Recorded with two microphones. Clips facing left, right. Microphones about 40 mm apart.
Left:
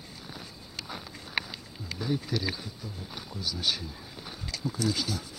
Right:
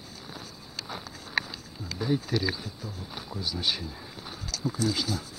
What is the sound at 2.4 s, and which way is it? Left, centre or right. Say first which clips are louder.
Speech: right 3 dB; centre.